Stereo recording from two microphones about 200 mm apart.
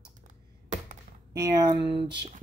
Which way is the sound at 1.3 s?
20° right (ahead or behind).